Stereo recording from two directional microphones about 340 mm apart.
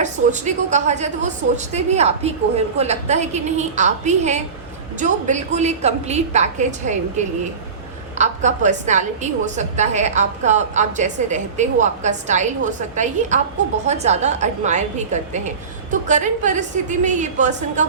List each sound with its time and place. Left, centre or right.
0.0 s a woman's voice: right
8.2 s a woman's voice: right